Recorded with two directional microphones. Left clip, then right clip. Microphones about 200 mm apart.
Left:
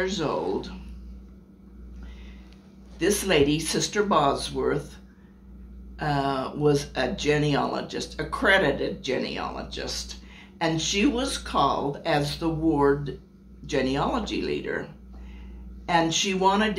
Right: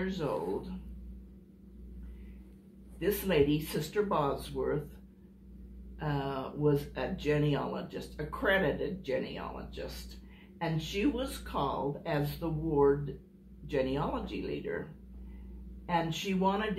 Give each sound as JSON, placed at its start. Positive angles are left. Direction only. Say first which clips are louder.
{"t": 3.0, "sound": "speech", "louder": "left 7 dB", "side_deg": 50}
{"t": 5.9, "sound": "speech", "louder": "left 10 dB", "side_deg": 50}
{"t": 15.9, "sound": "speech", "louder": "left 10 dB", "side_deg": 50}